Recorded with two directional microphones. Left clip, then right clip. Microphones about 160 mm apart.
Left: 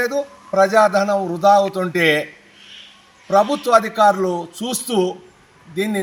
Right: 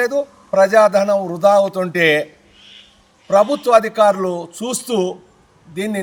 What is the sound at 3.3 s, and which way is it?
A man's voice, 30° right (ahead or behind).